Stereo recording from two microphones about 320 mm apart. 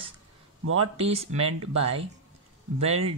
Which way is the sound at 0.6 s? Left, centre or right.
Right.